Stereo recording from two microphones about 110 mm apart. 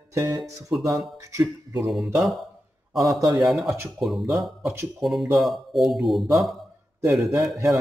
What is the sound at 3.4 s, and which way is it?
Speech, centre (ahead or behind).